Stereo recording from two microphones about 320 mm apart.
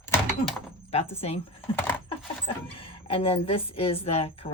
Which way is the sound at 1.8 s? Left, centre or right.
Centre.